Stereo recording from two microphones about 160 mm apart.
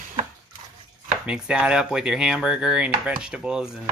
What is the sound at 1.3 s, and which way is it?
Speech, 5° right (ahead or behind).